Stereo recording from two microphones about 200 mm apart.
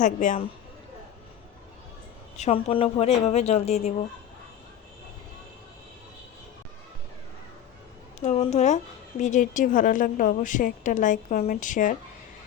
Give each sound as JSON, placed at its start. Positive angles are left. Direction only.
{"t": 0.0, "sound": "a woman's voice", "side_deg": 40}
{"t": 2.4, "sound": "a woman's voice", "side_deg": 30}
{"t": 8.2, "sound": "a woman's voice", "side_deg": 35}